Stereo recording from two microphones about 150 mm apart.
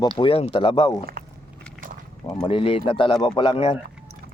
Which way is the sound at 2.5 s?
40° left (ahead or behind).